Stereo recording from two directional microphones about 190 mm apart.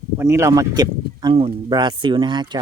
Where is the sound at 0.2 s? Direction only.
15° right (ahead or behind).